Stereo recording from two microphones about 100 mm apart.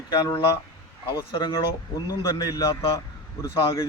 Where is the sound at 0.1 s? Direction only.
50° left (ahead or behind).